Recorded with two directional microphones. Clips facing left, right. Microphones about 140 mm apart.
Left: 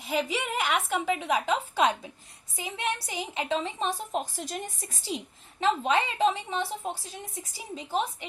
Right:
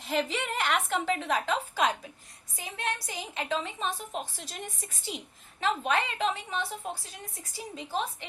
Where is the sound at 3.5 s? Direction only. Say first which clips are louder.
Left 2 dB; 30° left (ahead or behind).